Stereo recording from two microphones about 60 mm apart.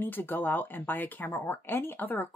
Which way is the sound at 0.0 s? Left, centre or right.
Left.